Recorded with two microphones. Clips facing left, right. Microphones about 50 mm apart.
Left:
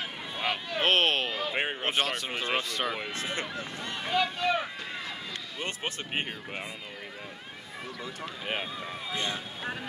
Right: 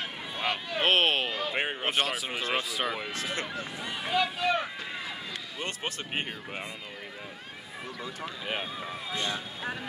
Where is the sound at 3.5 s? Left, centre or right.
Centre.